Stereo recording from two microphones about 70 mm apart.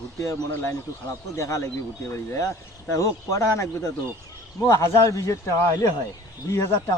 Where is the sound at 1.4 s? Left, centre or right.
Left.